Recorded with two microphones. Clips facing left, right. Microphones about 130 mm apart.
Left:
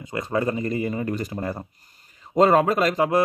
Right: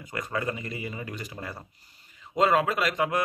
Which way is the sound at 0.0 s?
25° left (ahead or behind).